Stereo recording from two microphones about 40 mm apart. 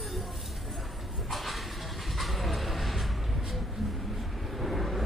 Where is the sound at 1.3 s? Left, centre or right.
Centre.